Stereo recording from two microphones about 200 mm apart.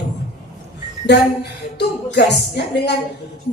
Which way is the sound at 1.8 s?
55° left (ahead or behind).